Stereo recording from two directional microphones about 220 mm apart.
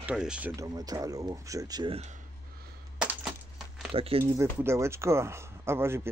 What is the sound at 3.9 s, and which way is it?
Speech, 25° right (ahead or behind).